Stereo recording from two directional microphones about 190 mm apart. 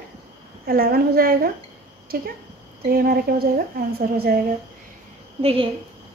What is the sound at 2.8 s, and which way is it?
Speech, 50° right (ahead or behind).